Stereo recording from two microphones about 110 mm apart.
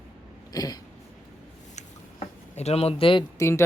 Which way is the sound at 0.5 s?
35° left (ahead or behind).